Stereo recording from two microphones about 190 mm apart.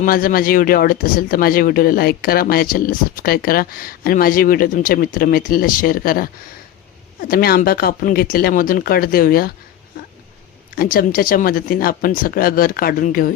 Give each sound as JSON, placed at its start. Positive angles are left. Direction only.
{"t": 0.0, "sound": "speech", "side_deg": 45}
{"t": 10.8, "sound": "speech", "side_deg": 50}